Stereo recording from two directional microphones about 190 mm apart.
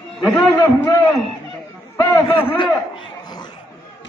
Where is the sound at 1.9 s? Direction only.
15° left (ahead or behind).